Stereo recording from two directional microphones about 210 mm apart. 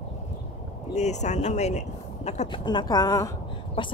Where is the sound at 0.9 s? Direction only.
35° left (ahead or behind).